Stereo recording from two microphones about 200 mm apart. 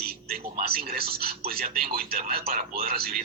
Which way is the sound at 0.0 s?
50° right (ahead or behind).